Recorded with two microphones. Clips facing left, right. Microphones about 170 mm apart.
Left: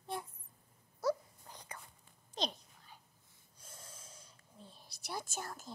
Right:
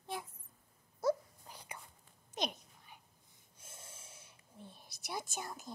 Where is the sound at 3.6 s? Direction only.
25° right (ahead or behind).